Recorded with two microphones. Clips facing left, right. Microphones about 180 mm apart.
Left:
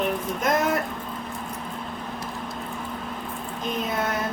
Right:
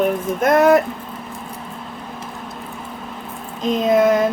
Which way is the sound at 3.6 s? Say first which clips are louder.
Right 12 dB; 90° right.